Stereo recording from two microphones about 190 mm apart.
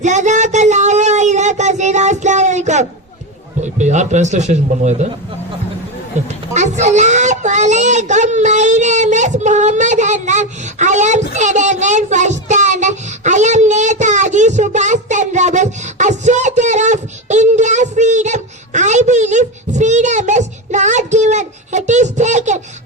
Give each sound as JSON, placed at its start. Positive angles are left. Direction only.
{"t": 0.0, "sound": "a sound", "side_deg": -40}
{"t": 3.6, "sound": "a man's voice", "side_deg": -40}
{"t": 6.5, "sound": "a woman's voice", "side_deg": -35}